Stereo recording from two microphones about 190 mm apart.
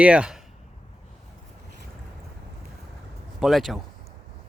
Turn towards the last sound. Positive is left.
turn(degrees=0)  # may be behind; listen again after turning